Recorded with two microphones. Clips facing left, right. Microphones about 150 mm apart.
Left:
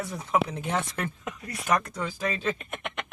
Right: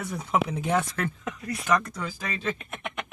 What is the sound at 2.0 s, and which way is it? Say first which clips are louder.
Speech: left 2 dB; centre (ahead or behind).